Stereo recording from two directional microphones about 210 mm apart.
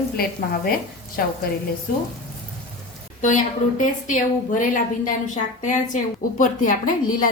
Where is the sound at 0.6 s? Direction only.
45° left (ahead or behind).